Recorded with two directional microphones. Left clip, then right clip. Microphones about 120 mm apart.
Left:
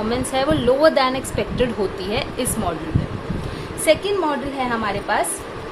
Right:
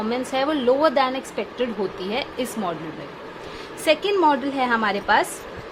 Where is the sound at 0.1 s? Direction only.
40° right (ahead or behind); by 1.6 s 20° right (ahead or behind).